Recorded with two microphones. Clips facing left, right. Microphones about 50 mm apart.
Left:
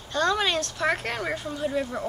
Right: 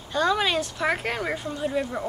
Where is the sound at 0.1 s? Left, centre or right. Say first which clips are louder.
Right 1 dB; centre.